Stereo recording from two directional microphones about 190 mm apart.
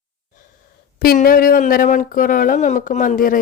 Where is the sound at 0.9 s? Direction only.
50° left (ahead or behind).